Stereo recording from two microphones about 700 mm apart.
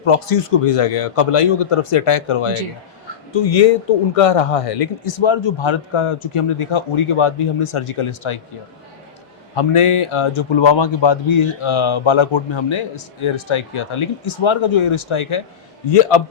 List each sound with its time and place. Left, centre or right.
0.0 s speech: left
9.6 s speech: left